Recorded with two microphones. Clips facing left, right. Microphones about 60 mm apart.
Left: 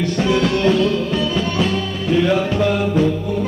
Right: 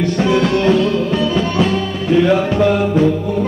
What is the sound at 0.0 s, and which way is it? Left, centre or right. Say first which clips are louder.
Music: right 3 dB; right.